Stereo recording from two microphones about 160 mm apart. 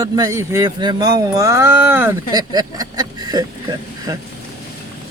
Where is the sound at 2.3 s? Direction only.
25° right (ahead or behind).